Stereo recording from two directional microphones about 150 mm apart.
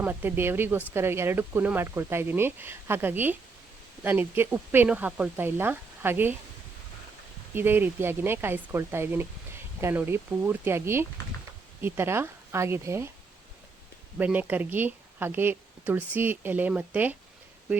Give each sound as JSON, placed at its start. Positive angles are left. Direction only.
{"t": 0.0, "sound": "a woman's voice", "side_deg": -10}
{"t": 7.5, "sound": "a woman's voice", "side_deg": -15}
{"t": 14.2, "sound": "a woman's voice", "side_deg": -10}